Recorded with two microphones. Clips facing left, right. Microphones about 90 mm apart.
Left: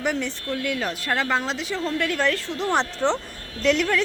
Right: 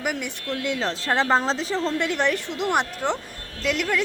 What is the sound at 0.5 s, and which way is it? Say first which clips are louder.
Speech: right 1 dB; 20° right (ahead or behind).